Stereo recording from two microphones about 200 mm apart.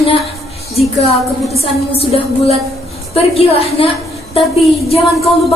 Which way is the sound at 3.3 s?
30° left (ahead or behind).